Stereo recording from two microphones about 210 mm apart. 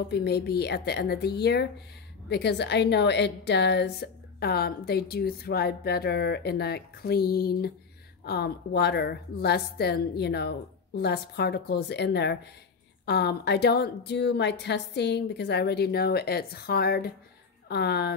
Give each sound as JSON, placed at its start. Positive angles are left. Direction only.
{"t": 0.1, "sound": "a woman's voice", "side_deg": 50}